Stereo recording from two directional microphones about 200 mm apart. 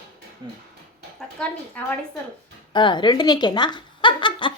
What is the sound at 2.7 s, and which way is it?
Speech, 25° left (ahead or behind).